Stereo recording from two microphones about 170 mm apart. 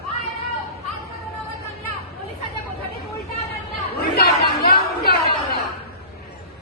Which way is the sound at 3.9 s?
65° left (ahead or behind).